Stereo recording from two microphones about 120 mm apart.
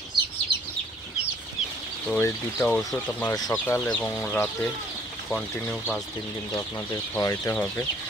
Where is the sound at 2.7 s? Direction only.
10° left (ahead or behind).